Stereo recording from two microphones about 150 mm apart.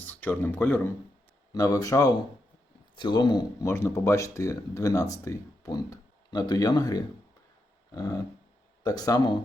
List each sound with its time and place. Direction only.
0.1 s speech: 10° left (ahead or behind)